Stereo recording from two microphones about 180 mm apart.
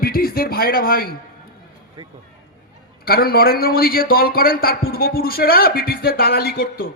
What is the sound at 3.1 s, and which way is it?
A man's voice, 55° left (ahead or behind).